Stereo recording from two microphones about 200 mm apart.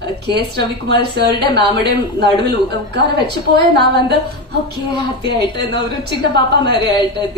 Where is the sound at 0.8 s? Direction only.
55° right (ahead or behind).